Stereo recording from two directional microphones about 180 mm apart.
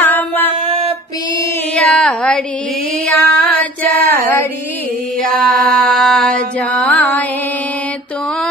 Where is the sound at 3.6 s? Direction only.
10° left (ahead or behind).